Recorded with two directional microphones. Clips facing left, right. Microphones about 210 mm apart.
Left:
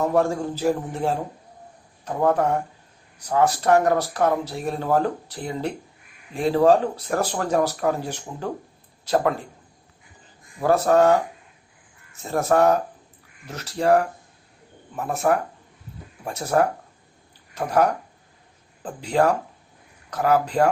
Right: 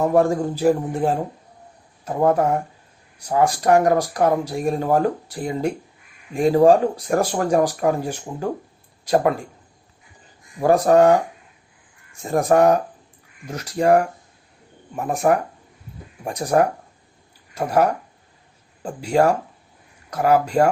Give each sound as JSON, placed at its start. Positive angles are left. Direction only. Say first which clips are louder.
{"t": 0.0, "sound": "speech", "louder": "right 3 dB", "side_deg": -15}
{"t": 2.2, "sound": "speech", "louder": "right 2 dB", "side_deg": -10}
{"t": 10.6, "sound": "speech", "louder": "right 3 dB", "side_deg": -15}
{"t": 12.2, "sound": "speech", "louder": "right 3 dB", "side_deg": -15}